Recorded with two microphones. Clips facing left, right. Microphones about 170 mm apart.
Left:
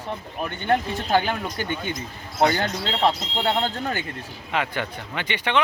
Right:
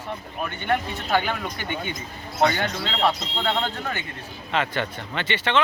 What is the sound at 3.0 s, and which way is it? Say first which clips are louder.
Speech: left 1 dB; 30° left (ahead or behind).